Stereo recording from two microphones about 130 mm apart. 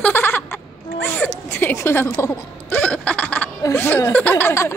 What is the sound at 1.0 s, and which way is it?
Zipper, 15° left (ahead or behind).